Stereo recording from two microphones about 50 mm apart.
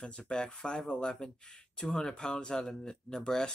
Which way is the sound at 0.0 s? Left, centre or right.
Centre.